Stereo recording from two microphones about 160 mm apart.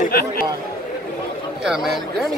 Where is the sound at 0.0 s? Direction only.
65° left (ahead or behind).